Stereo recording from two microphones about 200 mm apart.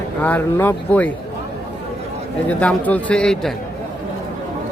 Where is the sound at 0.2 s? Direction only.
10° left (ahead or behind).